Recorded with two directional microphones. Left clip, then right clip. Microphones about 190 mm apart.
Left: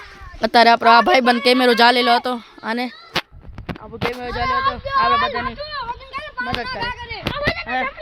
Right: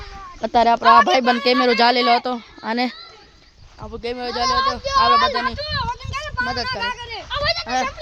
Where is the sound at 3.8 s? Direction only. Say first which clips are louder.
Left 1 dB; 20° right (ahead or behind).